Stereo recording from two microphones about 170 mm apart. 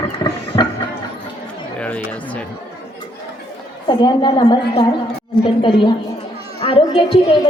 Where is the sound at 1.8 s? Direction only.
10° left (ahead or behind).